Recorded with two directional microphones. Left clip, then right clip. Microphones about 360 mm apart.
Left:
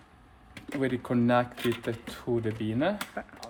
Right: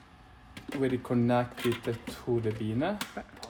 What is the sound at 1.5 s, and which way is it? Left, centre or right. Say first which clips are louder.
Speech: left 1 dB; centre.